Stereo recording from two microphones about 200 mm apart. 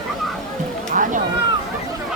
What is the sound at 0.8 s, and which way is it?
Cat, 40° right (ahead or behind).